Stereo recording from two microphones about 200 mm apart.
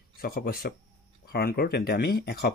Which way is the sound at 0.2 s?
50° left (ahead or behind).